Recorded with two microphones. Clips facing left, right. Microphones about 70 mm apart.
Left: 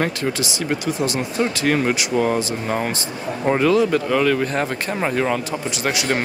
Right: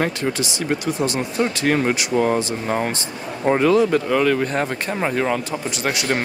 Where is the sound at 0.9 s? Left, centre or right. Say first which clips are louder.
Even; centre.